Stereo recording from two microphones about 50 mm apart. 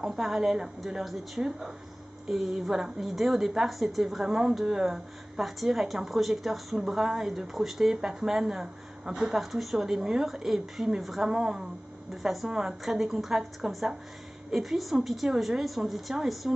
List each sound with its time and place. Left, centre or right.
0.0 s a woman's voice: centre